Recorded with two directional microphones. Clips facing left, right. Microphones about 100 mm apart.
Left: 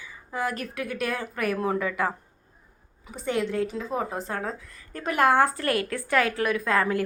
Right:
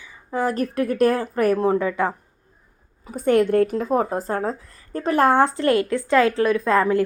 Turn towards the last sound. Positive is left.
turn(degrees=-25)  # may be behind; listen again after turning